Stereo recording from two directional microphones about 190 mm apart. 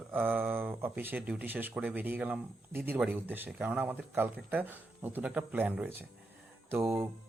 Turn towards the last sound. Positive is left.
turn(degrees=-15)  # may be behind; listen again after turning